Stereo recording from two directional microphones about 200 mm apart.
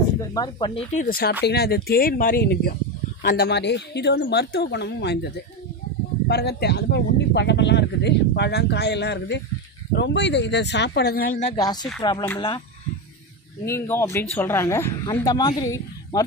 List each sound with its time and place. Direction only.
0.3 s speech: 20° left (ahead or behind)
0.7 s speech: 30° left (ahead or behind)
1.0 s speech: 50° left (ahead or behind)
11.5 s speech: 20° left (ahead or behind)
13.7 s speech: 10° left (ahead or behind)